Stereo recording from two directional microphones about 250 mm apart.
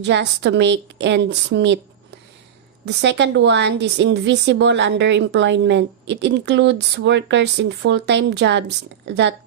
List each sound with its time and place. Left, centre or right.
0.0 s a woman's voice: right
2.8 s a woman's voice: right